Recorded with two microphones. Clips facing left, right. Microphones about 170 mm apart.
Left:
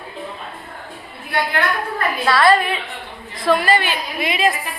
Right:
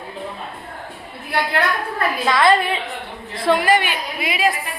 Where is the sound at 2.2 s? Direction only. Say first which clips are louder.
Left 1 dB; 20° right (ahead or behind).